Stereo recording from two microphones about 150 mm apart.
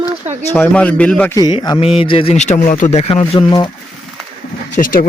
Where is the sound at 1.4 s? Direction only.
30° left (ahead or behind).